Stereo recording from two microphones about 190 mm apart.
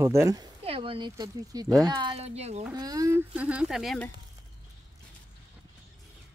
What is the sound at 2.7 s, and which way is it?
Speech, 20° right (ahead or behind).